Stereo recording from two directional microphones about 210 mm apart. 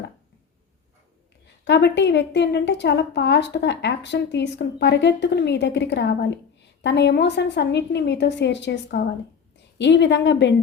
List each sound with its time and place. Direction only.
1.6 s a woman's voice: 55° left (ahead or behind)